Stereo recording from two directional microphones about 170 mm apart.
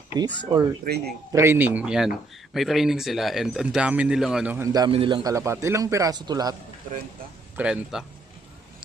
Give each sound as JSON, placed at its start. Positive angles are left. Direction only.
{"t": 0.5, "sound": "speech", "side_deg": -25}
{"t": 0.9, "sound": "a man's voice", "side_deg": -55}
{"t": 1.3, "sound": "speech", "side_deg": -15}
{"t": 7.5, "sound": "speech", "side_deg": -5}